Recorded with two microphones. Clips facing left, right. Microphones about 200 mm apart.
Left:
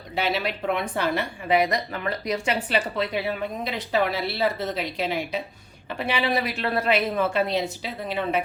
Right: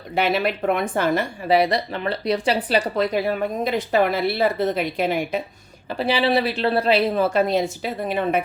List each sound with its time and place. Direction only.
0.2 s a woman's voice: 55° right (ahead or behind)
5.9 s a woman's voice: 30° right (ahead or behind); by 8.4 s 50° right (ahead or behind)